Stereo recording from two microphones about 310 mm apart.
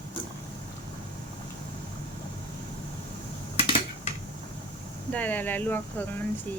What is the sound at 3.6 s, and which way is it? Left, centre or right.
Dishes, centre.